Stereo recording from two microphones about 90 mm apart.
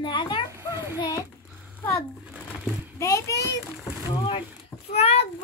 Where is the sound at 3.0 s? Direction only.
35° left (ahead or behind).